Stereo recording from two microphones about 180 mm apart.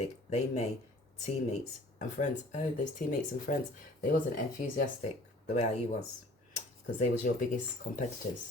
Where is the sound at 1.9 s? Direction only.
45° left (ahead or behind).